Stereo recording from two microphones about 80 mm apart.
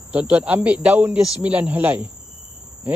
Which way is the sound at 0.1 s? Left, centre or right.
Centre.